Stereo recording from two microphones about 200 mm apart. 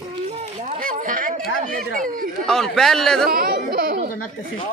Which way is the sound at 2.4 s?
Centre (ahead or behind).